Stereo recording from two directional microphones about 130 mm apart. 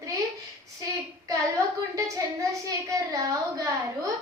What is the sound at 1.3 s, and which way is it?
Speech, 25° right (ahead or behind).